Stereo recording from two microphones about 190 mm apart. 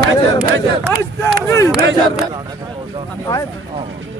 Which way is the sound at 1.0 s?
15° left (ahead or behind).